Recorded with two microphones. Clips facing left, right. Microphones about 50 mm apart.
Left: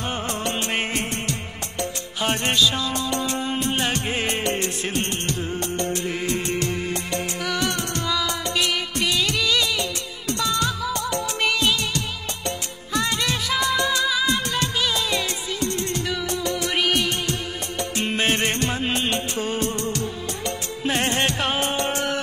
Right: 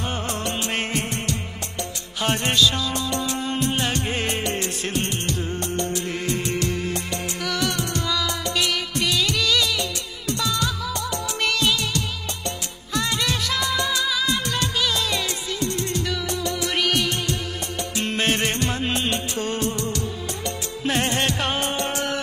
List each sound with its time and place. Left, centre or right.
0.1 s music of bollywood: centre
2.2 s music: centre
6.0 s music: centre
10.4 s music: left
13.2 s music: centre
15.6 s music: left
16.0 s music: centre
19.7 s music: left
20.8 s music: centre